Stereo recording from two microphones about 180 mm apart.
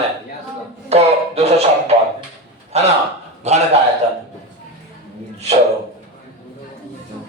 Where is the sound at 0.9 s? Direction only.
35° right (ahead or behind).